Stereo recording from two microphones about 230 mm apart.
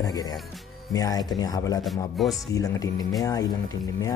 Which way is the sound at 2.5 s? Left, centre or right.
Centre.